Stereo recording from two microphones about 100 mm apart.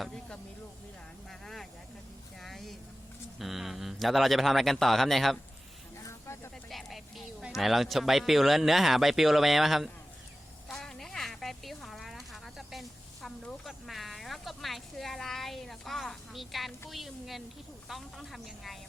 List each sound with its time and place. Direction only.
0.0 s a sound: 5° left (ahead or behind)
3.3 s speech: centre (ahead or behind)
6.0 s snake: 30° left (ahead or behind)
6.7 s speech: centre (ahead or behind)
10.7 s a sound: 5° left (ahead or behind)
16.9 s a woman's voice: centre (ahead or behind)